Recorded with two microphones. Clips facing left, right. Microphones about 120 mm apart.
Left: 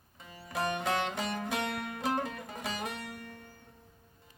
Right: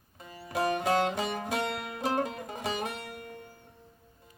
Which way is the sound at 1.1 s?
15° right (ahead or behind).